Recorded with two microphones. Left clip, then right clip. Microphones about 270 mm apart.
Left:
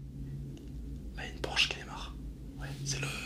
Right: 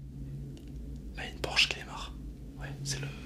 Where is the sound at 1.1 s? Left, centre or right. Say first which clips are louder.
Right 3 dB; centre.